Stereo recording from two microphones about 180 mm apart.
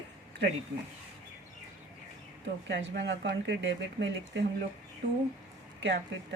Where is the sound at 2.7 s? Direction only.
75° right (ahead or behind).